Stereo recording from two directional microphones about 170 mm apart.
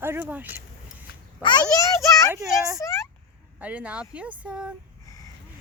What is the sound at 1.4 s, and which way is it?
Speech, 25° left (ahead or behind).